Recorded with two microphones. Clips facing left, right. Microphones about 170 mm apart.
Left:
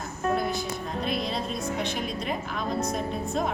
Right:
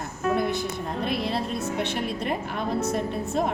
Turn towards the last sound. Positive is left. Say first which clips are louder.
# right 2 dB
turn(degrees=-60)  # may be behind; listen again after turning